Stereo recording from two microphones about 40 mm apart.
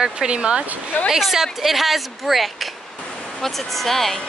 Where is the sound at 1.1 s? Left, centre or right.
Centre.